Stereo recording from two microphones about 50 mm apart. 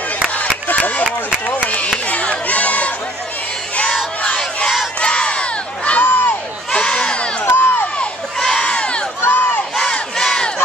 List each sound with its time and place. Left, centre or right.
0.3 s a sound: left
1.9 s crowd: left
5.0 s crowd: centre
5.9 s a sound: left
6.7 s crowd: centre
7.4 s crowd: left
8.4 s crowd: centre
9.2 s crowd: left
10.1 s crowd: centre